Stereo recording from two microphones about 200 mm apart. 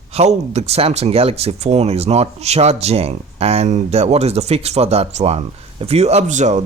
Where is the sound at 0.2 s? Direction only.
35° right (ahead or behind).